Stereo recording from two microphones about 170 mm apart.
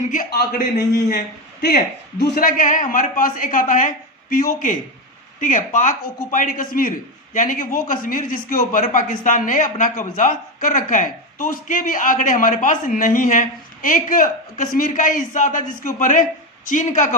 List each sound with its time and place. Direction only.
0.0 s a man's voice: 50° left (ahead or behind)